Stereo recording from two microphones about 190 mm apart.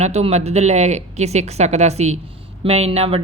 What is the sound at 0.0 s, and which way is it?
Speech, 35° right (ahead or behind).